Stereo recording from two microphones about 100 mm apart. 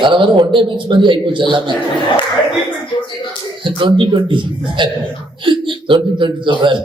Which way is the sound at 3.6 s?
55° right (ahead or behind).